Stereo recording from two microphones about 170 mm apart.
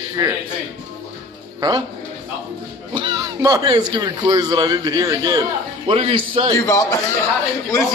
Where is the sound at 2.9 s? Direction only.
25° right (ahead or behind).